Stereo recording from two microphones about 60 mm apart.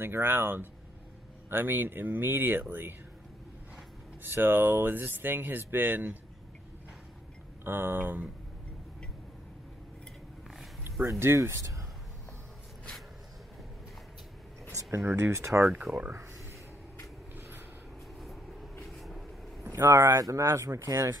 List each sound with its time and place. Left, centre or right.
0.0 s speech: right
4.2 s speech: right
7.6 s speech: right
11.3 s speech: right
14.9 s speech: right
15.3 s speech: right
15.9 s speech: centre
18.2 s vehicle: centre
19.7 s speech: right
20.2 s speech: right